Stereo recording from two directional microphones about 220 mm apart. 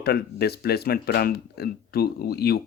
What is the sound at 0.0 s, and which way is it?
Speech, 45° left (ahead or behind).